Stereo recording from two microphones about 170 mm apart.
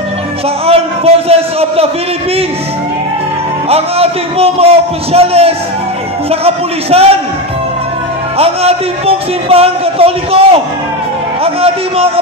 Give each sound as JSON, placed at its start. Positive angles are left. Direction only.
{"t": 0.7, "sound": "a man's voice", "side_deg": -35}
{"t": 3.6, "sound": "a man's voice", "side_deg": -35}
{"t": 8.4, "sound": "a man's voice", "side_deg": -35}